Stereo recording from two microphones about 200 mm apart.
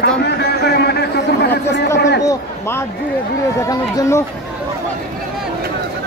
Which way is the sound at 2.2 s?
10° left (ahead or behind).